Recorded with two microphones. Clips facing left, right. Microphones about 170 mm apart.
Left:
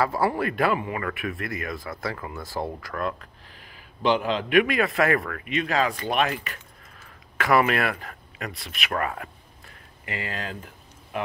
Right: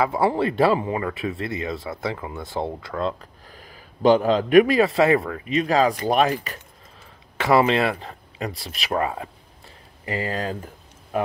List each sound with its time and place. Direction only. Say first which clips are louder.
0.0 s speech: right 3 dB; 20° right (ahead or behind)
3.5 s speech: right 6 dB; 40° right (ahead or behind); by 5.6 s 25° right (ahead or behind)
5.6 s speech: right 5 dB; 35° right (ahead or behind)
8.9 s speech: right 4 dB; 20° right (ahead or behind)
10.0 s speech: right 7 dB; 35° right (ahead or behind)